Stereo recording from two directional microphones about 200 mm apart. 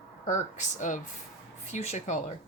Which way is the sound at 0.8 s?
40° left (ahead or behind).